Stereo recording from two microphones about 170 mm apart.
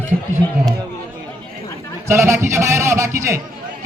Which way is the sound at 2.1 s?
15° right (ahead or behind).